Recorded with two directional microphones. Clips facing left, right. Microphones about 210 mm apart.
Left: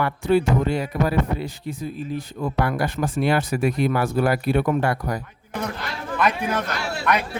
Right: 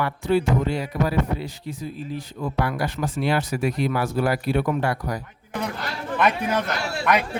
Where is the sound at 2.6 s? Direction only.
50° left (ahead or behind).